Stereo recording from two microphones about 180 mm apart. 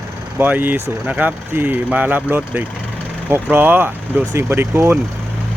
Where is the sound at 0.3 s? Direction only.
10° right (ahead or behind).